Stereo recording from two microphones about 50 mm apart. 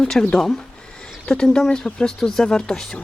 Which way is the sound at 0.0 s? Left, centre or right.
Centre.